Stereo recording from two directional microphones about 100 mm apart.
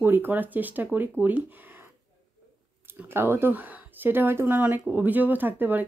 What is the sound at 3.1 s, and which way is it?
Speech, 25° right (ahead or behind).